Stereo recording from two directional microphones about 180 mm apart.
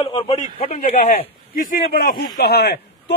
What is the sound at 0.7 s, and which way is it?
Speech, 40° left (ahead or behind).